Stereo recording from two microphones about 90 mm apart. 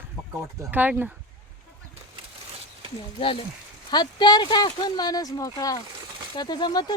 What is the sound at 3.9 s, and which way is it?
Speech, 50° left (ahead or behind).